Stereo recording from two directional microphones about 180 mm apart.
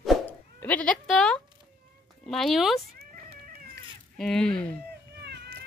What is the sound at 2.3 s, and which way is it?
Speech, centre (ahead or behind).